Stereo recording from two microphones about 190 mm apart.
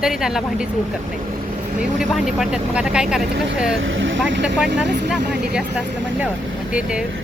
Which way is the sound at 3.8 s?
85° right.